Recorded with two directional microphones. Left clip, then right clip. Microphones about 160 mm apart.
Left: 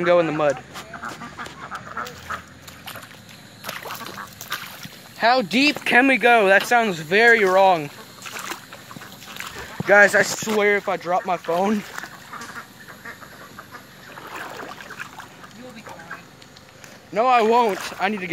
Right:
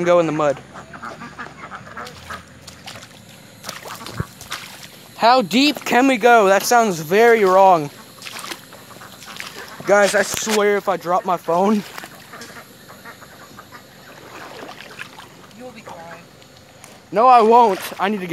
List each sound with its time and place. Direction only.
0.0 s speech: 25° right (ahead or behind)
2.2 s duck: 5° right (ahead or behind)
5.2 s speech: 35° right (ahead or behind)
9.9 s speech: 10° right (ahead or behind)
10.6 s speech: 30° right (ahead or behind)
17.1 s speech: 45° right (ahead or behind)